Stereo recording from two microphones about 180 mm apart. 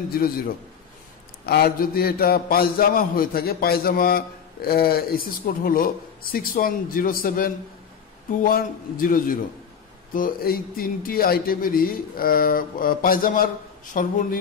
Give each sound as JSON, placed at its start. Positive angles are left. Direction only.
{"t": 1.4, "sound": "a man's voice", "side_deg": 60}